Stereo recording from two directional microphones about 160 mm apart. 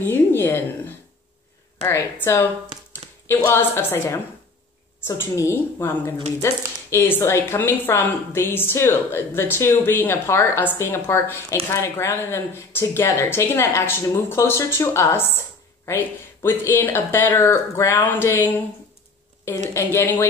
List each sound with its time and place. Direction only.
0.0 s speech: 15° left (ahead or behind)
1.8 s speech: 10° left (ahead or behind)
19.7 s speech: 15° left (ahead or behind)